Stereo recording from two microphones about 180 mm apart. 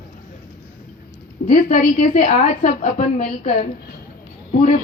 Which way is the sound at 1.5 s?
45° left (ahead or behind).